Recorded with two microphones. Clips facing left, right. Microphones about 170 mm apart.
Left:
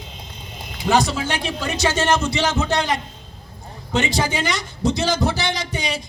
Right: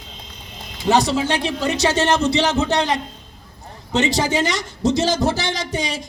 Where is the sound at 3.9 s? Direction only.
40° right (ahead or behind).